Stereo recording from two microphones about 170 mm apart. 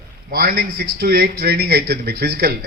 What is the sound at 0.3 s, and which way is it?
A man's voice, 65° right (ahead or behind).